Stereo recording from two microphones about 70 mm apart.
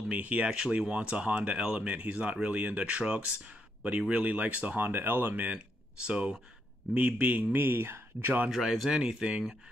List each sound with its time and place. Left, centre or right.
0.1 s speech: centre
7.5 s speech: right
8.5 s speech: centre